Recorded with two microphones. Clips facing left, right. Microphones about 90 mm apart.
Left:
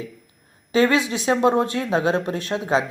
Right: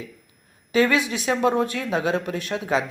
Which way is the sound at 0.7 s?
25° left (ahead or behind).